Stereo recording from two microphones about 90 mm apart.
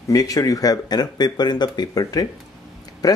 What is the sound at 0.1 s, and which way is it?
Speech, 45° left (ahead or behind).